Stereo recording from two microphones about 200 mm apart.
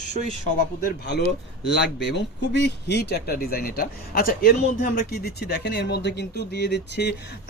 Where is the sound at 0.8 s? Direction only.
55° left (ahead or behind).